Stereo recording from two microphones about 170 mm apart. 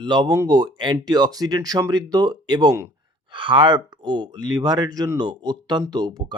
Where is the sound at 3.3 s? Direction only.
30° right (ahead or behind).